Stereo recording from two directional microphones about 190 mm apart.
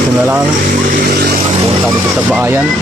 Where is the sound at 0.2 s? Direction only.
5° right (ahead or behind).